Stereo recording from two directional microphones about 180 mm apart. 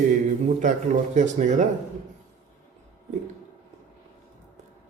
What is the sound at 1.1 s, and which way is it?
Speech, 45° right (ahead or behind).